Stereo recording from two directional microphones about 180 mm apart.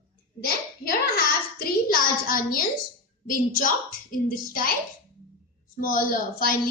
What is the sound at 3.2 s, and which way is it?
Speech, 50° left (ahead or behind).